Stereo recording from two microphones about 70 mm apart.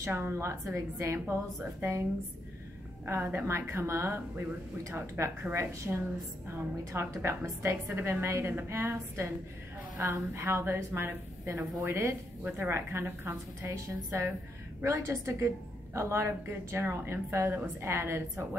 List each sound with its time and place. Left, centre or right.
0.0 s a woman's voice: right
1.3 s a woman's voice: right
3.2 s a woman's voice: right
3.4 s a woman's voice: right
12.4 s a woman's voice: right